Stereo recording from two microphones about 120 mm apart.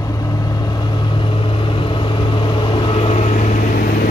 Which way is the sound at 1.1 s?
45° left (ahead or behind).